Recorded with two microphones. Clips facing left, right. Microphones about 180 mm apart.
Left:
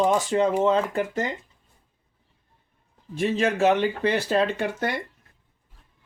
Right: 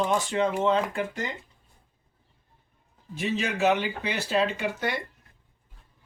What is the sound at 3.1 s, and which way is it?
Speech, 50° left (ahead or behind).